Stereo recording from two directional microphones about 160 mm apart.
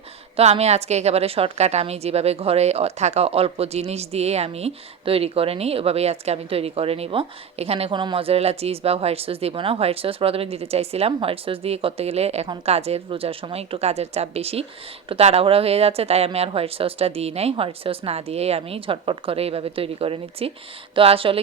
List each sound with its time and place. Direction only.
0.3 s a woman's voice: 40° right (ahead or behind)